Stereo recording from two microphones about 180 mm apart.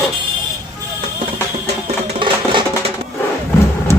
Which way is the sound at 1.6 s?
35° right (ahead or behind).